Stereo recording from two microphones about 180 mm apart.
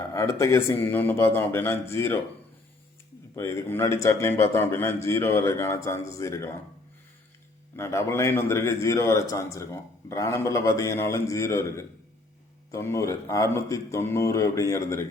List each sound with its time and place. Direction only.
0.1 s a man's voice: 15° left (ahead or behind)
3.3 s a man's voice: 15° left (ahead or behind)
7.8 s a man's voice: 15° left (ahead or behind)